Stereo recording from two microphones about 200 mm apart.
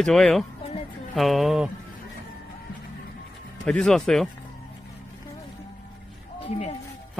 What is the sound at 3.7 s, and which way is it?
Speech, 5° left (ahead or behind).